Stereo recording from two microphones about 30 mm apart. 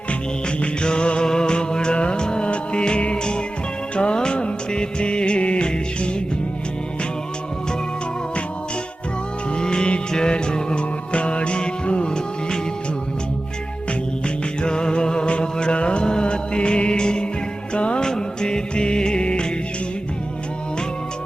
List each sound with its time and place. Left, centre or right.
0.4 s music: left
3.9 s music of bollywood: left
9.6 s music: left
14.6 s music: left
18.0 s music: left